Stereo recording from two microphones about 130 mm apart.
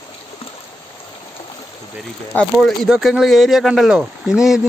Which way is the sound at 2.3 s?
Centre (ahead or behind).